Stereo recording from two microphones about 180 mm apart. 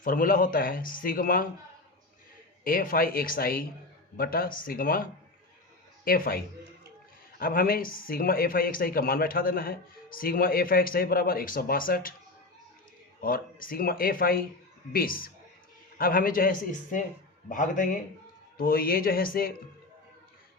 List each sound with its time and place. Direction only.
0.0 s a man's voice: 50° left (ahead or behind)
2.6 s a man's voice: 50° left (ahead or behind)
6.1 s speech: 55° left (ahead or behind)
13.2 s a man's voice: 50° left (ahead or behind)